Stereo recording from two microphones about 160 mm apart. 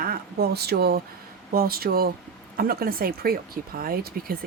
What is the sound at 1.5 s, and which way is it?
A woman's voice, 70° right (ahead or behind).